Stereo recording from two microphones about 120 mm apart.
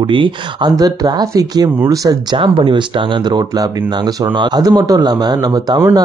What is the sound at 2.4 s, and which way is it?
Speech, 45° right (ahead or behind).